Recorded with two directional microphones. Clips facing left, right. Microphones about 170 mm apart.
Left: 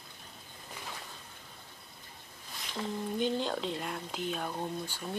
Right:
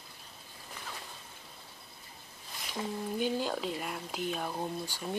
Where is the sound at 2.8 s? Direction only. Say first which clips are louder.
Left 1 dB; 10° right (ahead or behind).